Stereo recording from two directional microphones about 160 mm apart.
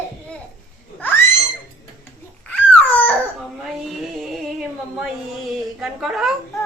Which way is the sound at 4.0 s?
Centre (ahead or behind).